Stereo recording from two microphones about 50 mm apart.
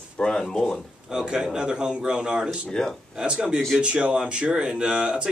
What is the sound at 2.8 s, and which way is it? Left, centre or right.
Speech, centre.